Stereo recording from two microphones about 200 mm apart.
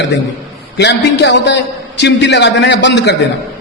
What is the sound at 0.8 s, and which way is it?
A man's voice, 60° left (ahead or behind).